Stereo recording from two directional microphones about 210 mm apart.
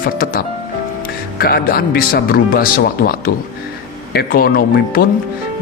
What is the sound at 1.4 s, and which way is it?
Speech, 45° left (ahead or behind).